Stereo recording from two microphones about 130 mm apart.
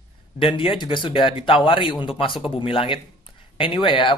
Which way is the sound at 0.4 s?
40° left (ahead or behind).